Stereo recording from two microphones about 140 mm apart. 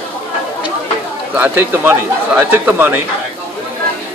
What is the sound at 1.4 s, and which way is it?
A man's voice, 15° right (ahead or behind).